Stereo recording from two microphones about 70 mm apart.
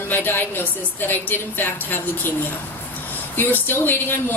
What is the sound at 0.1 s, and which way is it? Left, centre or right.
A woman's voice, left.